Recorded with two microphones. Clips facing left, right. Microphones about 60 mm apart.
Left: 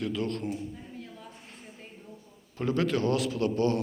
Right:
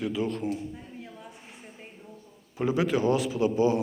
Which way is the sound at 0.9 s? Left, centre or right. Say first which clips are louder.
Right 1 dB; centre.